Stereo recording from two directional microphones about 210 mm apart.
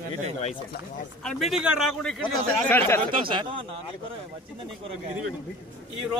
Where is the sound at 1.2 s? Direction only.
Centre (ahead or behind).